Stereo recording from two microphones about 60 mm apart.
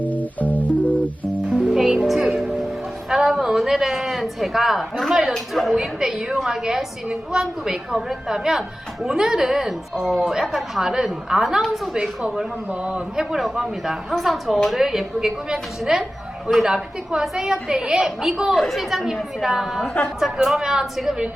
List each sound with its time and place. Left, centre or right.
0.0 s music: left
1.7 s music: centre
3.1 s a sound: centre
5.3 s a woman's voice: centre